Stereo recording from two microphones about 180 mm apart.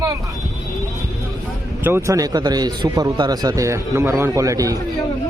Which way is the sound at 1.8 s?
15° right (ahead or behind).